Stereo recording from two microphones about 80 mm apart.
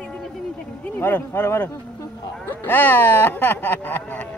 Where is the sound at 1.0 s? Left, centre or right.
Left.